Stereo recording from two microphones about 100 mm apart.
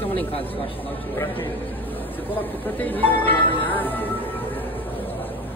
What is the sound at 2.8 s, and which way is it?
Speech, 20° left (ahead or behind).